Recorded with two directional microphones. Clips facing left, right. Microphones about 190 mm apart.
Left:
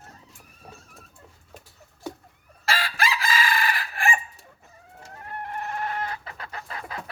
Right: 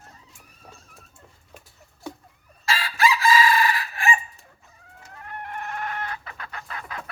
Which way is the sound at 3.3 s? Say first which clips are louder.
Right 6 dB; 55° left (ahead or behind).